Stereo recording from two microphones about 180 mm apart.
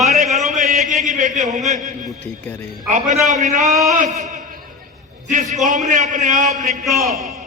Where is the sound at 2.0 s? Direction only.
5° left (ahead or behind).